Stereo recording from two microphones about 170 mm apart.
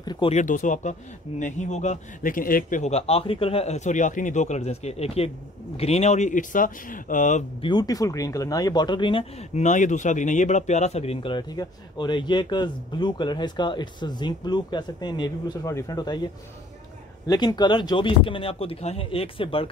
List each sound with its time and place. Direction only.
0.0 s speech: 25° left (ahead or behind)
0.3 s a man's voice: 50° left (ahead or behind)
7.6 s speech: 25° left (ahead or behind)
9.5 s speech: 45° left (ahead or behind); by 16.2 s 20° left (ahead or behind)
17.3 s speech: 25° left (ahead or behind)